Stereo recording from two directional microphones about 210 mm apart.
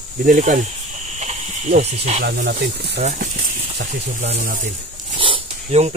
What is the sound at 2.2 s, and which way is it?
Speech, 50° right (ahead or behind).